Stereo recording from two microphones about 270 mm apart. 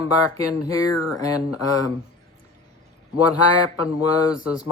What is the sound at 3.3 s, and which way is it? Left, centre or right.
Music, left.